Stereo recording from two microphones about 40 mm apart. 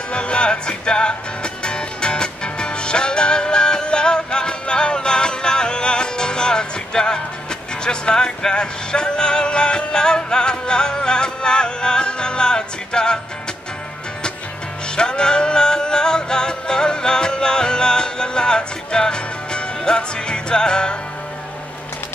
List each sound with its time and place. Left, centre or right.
0.1 s music: left
15.0 s music: centre